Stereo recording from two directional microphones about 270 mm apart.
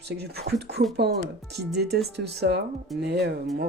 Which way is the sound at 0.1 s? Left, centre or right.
Right.